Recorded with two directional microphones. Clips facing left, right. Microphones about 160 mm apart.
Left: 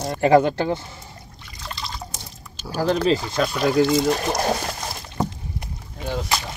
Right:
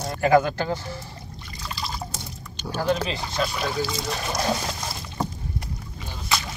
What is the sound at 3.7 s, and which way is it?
Speech, 55° left (ahead or behind).